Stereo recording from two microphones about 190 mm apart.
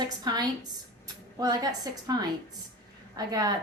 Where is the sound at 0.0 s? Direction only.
20° right (ahead or behind).